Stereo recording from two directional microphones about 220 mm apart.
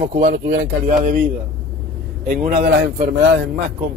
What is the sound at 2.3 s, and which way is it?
Speech, 35° right (ahead or behind).